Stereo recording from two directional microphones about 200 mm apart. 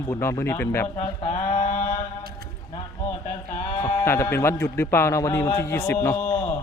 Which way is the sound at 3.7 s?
10° left (ahead or behind).